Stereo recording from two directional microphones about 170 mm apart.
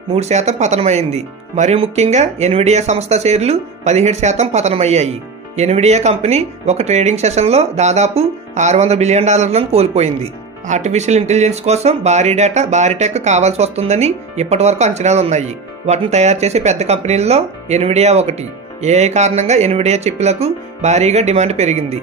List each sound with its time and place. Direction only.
0.1 s speech: 40° right (ahead or behind)